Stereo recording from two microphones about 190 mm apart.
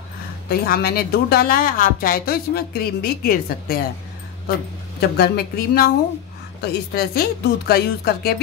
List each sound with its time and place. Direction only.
0.5 s a woman's voice: 55° left (ahead or behind)
5.0 s a woman's voice: 55° left (ahead or behind)